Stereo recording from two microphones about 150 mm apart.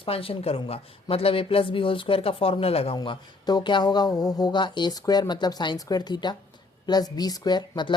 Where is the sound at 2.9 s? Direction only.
30° left (ahead or behind).